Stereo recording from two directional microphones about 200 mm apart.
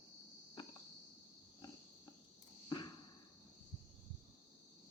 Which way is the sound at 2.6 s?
20° left (ahead or behind).